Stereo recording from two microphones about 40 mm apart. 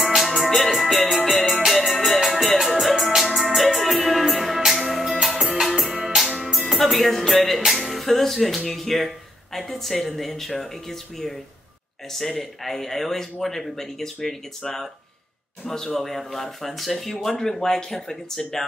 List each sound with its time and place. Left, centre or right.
0.0 s music: centre
6.8 s speech: centre